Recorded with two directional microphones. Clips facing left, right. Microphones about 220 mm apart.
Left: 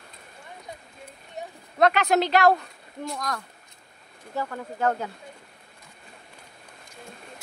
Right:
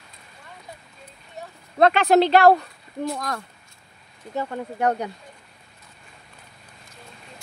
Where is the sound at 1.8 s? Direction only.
30° right (ahead or behind).